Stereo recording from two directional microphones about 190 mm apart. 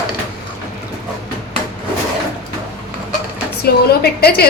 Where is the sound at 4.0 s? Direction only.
55° left (ahead or behind).